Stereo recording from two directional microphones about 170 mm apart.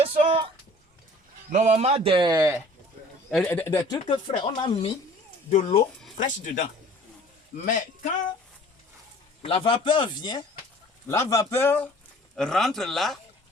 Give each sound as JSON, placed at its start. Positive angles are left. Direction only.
{"t": 0.0, "sound": "a sound", "side_deg": -35}
{"t": 1.5, "sound": "speech", "side_deg": -40}
{"t": 3.3, "sound": "speech", "side_deg": 10}
{"t": 3.9, "sound": "speech", "side_deg": 30}
{"t": 5.5, "sound": "a man's voice", "side_deg": 40}
{"t": 9.4, "sound": "speech", "side_deg": 35}
{"t": 12.4, "sound": "speech", "side_deg": 5}